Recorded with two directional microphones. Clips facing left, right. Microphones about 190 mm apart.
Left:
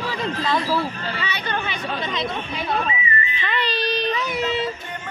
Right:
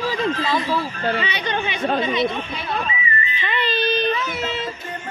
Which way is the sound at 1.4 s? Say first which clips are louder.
Right 3 dB; 15° right (ahead or behind).